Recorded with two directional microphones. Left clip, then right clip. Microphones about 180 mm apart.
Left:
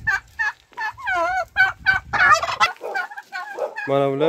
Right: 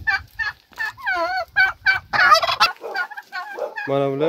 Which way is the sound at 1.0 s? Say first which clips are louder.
Left 1 dB; 25° right (ahead or behind).